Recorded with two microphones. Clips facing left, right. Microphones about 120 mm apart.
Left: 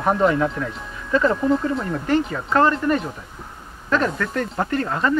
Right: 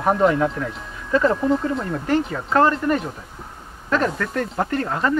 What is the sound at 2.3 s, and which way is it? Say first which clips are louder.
Speech: right 1 dB; 20° right (ahead or behind).